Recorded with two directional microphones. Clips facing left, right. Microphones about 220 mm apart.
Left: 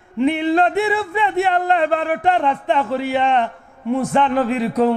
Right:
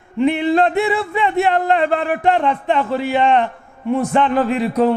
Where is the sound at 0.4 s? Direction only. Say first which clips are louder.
Right 1 dB; 15° right (ahead or behind).